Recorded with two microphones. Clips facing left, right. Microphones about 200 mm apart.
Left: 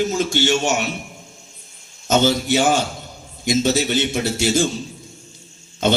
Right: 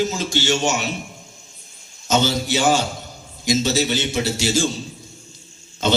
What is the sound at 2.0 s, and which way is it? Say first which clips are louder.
A man's voice: left 3 dB; 50° left (ahead or behind).